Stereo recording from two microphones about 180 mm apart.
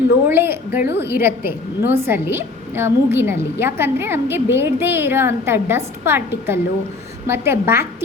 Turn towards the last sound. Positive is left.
turn(degrees=-15)  # may be behind; listen again after turning